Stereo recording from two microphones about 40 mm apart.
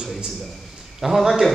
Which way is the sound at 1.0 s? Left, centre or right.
Centre.